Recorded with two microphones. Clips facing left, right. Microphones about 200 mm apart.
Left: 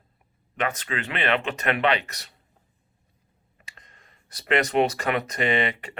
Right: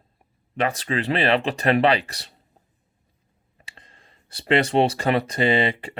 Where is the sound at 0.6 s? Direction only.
35° right (ahead or behind).